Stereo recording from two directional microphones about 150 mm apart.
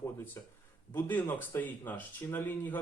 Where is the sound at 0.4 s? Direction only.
20° left (ahead or behind).